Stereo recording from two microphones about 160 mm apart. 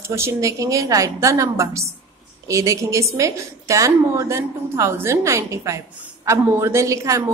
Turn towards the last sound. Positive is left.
turn(degrees=-20)  # may be behind; listen again after turning